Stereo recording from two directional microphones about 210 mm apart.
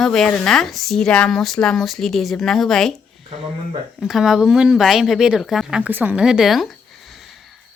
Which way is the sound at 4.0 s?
Centre (ahead or behind).